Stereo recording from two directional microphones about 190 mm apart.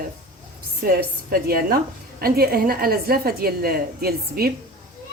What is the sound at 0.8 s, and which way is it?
A woman's voice, 50° right (ahead or behind).